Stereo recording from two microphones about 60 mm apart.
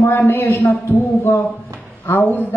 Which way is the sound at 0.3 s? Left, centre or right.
Left.